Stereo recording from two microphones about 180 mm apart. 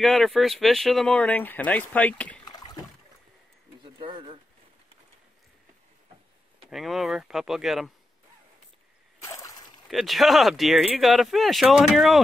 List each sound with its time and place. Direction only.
0.0 s speech: centre (ahead or behind)
2.4 s rowboat: 20° left (ahead or behind)
3.8 s a sound: 30° right (ahead or behind)
6.7 s speech: centre (ahead or behind)
9.2 s a sound: 15° left (ahead or behind)
9.8 s speech: centre (ahead or behind)